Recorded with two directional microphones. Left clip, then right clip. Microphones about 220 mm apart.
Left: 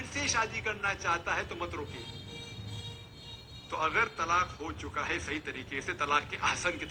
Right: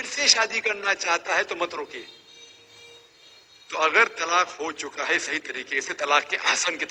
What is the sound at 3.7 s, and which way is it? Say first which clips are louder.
A man's voice: right 9 dB; 45° right (ahead or behind).